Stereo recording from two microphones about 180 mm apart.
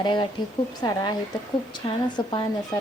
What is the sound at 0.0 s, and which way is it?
A woman's voice, 25° left (ahead or behind).